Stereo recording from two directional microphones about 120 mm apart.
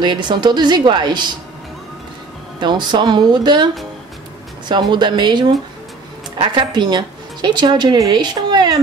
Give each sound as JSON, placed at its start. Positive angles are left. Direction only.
{"t": 0.0, "sound": "a woman's voice", "side_deg": -40}
{"t": 2.6, "sound": "a woman's voice", "side_deg": -40}